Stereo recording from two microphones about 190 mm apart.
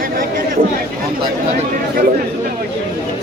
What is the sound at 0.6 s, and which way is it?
Speech, 50° right (ahead or behind).